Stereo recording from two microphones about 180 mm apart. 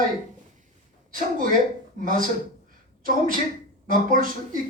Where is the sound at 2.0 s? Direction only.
50° right (ahead or behind).